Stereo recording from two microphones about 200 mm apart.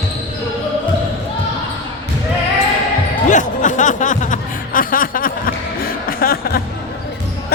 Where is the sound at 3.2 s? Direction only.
40° left (ahead or behind).